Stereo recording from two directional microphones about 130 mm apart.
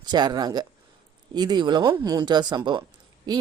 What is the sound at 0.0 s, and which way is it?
Speech, 35° right (ahead or behind).